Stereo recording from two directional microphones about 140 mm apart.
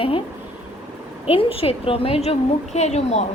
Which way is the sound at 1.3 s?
40° left (ahead or behind).